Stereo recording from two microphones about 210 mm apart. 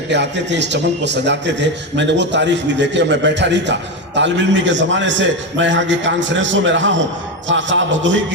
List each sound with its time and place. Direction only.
0.1 s a man's voice: 55° right (ahead or behind)